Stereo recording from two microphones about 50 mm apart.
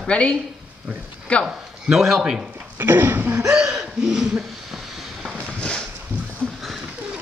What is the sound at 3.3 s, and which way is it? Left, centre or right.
Gasp, centre.